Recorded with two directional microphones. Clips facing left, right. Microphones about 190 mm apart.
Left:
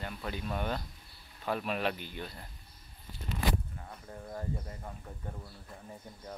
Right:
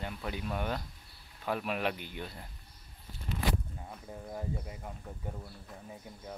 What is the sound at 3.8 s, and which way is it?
Speech, 10° right (ahead or behind).